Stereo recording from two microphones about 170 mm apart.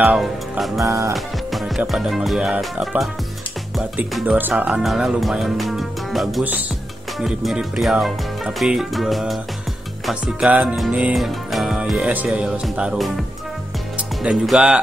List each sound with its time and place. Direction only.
0.0 s music: centre (ahead or behind)
0.7 s music: 20° right (ahead or behind)
1.1 s music: centre (ahead or behind)
14.2 s music: centre (ahead or behind)